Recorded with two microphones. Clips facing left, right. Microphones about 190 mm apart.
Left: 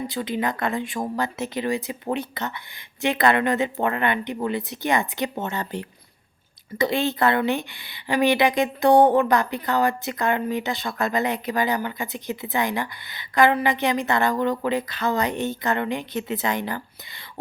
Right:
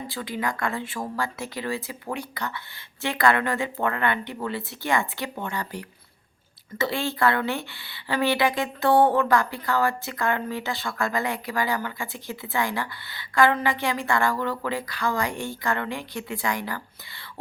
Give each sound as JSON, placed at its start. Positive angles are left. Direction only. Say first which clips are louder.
{"t": 0.1, "sound": "a woman's voice", "louder": "left 4 dB", "side_deg": 20}